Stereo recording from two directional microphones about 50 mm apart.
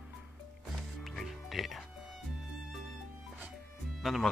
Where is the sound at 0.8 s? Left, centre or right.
Centre.